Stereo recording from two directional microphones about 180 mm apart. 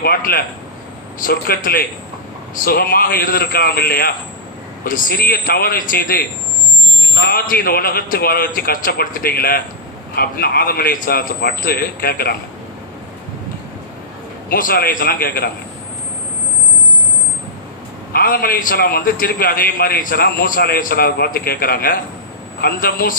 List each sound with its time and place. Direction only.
0.0 s a man's voice: 55° left (ahead or behind)
7.3 s a man's voice: 55° left (ahead or behind)
14.5 s a man's voice: 55° left (ahead or behind)
18.1 s a man's voice: 55° left (ahead or behind)